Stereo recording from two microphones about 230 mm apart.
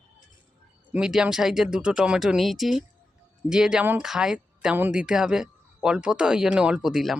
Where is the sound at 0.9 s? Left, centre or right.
Centre.